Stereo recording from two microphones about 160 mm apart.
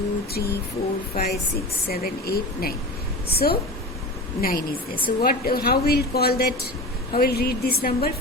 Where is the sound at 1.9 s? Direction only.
75° left (ahead or behind).